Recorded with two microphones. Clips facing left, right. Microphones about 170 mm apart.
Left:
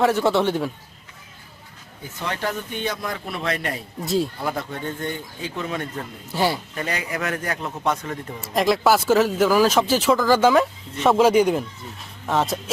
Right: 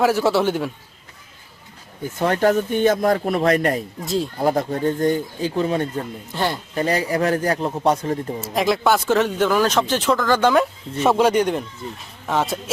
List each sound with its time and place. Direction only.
0.0 s speech: 5° right (ahead or behind)
2.1 s speech: 45° right (ahead or behind)
4.0 s speech: centre (ahead or behind)
4.4 s speech: 40° right (ahead or behind)
6.3 s speech: 10° left (ahead or behind)
6.7 s speech: 35° right (ahead or behind)
8.4 s speech: centre (ahead or behind)